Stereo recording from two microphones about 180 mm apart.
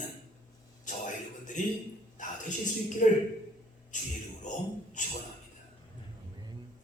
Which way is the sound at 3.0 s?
50° left (ahead or behind).